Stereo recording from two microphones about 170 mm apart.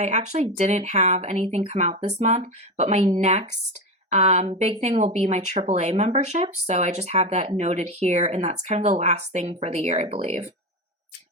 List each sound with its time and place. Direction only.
0.0 s speech: 45° right (ahead or behind)